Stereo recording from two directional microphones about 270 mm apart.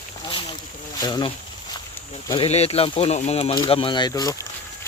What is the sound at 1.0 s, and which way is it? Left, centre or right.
Speech, centre.